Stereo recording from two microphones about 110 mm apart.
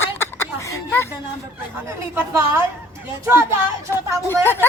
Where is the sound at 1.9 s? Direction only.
25° right (ahead or behind).